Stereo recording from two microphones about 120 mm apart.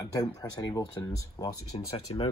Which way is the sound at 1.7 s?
50° left (ahead or behind).